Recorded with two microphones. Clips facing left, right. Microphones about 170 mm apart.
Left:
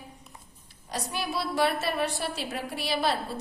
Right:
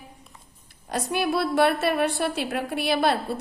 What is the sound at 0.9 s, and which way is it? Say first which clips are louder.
A woman's voice: right 8 dB; 60° right (ahead or behind).